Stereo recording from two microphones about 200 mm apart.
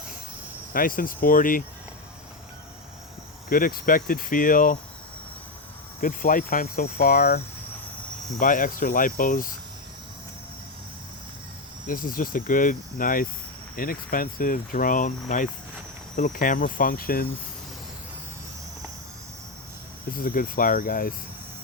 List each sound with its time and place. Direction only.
0.7 s speech: 45° left (ahead or behind)
3.5 s speech: 45° left (ahead or behind)
6.0 s speech: 40° left (ahead or behind)
8.4 s speech: 45° left (ahead or behind)
11.9 s speech: 45° left (ahead or behind)
20.1 s speech: 45° left (ahead or behind)